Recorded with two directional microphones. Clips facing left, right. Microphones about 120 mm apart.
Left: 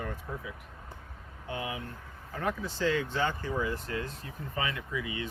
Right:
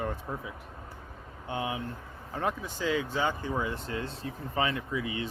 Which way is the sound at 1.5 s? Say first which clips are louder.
Right 3 dB; 25° right (ahead or behind).